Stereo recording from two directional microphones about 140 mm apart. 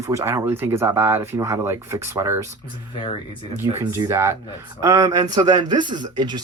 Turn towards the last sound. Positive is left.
turn(degrees=-30)  # may be behind; listen again after turning